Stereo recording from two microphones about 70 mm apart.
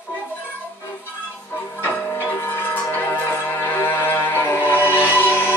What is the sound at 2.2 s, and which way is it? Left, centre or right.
Music, left.